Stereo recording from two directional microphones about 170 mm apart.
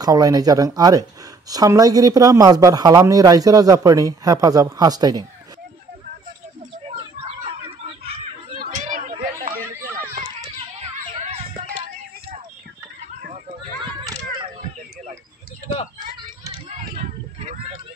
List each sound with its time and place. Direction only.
0.0 s speech: 20° right (ahead or behind)
8.5 s chatter: 50° right (ahead or behind)
16.6 s a sound: 40° right (ahead or behind)